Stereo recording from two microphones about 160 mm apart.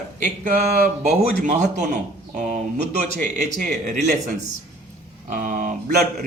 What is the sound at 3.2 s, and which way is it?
Speech, 55° right (ahead or behind).